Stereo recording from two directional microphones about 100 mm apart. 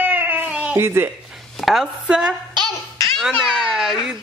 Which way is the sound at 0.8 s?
25° right (ahead or behind).